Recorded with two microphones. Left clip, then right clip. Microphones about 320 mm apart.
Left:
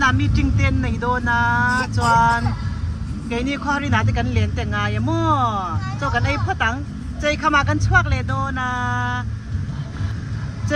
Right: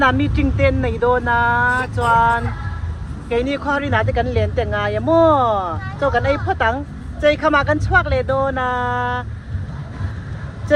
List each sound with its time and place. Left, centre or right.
0.0 s speech: centre